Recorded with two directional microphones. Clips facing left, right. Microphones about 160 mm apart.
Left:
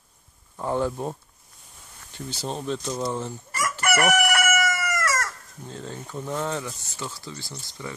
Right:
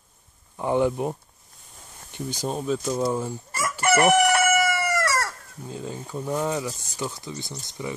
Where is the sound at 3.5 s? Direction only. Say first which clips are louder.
Right 3 dB; 25° right (ahead or behind).